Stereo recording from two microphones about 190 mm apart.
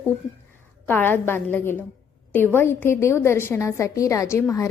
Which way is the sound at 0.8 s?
10° left (ahead or behind).